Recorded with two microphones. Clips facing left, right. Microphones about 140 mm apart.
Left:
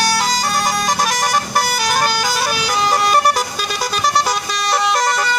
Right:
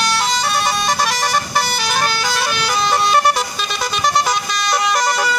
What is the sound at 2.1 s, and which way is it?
Vehicle, 10° left (ahead or behind).